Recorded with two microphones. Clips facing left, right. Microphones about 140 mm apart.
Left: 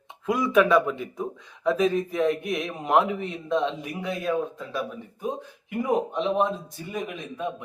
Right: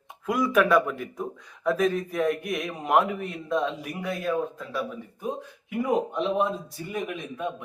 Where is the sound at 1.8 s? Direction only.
15° left (ahead or behind).